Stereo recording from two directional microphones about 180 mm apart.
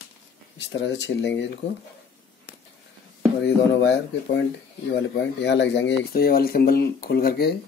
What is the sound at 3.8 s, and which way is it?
Speech, 90° left.